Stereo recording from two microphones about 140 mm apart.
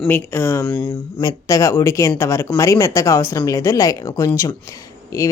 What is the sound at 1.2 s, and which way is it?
Speech, 25° left (ahead or behind).